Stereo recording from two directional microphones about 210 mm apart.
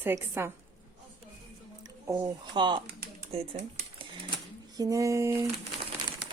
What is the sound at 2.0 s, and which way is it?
Speech, 15° right (ahead or behind).